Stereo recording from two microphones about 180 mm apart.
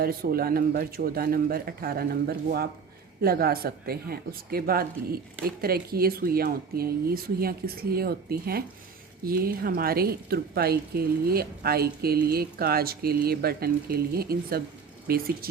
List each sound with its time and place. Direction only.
0.0 s speech: 55° right (ahead or behind)